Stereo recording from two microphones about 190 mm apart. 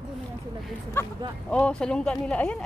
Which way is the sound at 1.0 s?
10° left (ahead or behind).